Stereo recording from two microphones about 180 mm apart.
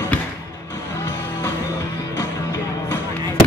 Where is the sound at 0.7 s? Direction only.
15° left (ahead or behind).